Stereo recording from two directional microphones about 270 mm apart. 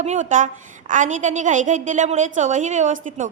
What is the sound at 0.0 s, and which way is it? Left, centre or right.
A woman's voice, right.